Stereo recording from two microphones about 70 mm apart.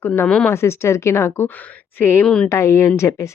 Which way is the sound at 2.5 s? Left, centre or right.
Left.